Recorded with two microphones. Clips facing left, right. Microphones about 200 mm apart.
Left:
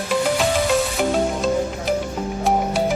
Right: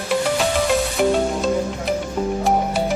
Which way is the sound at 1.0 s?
Centre (ahead or behind).